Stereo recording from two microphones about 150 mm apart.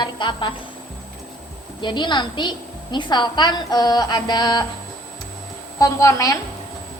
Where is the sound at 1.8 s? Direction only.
30° left (ahead or behind).